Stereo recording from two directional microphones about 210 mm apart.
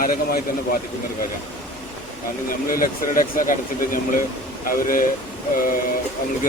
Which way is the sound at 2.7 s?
40° left (ahead or behind).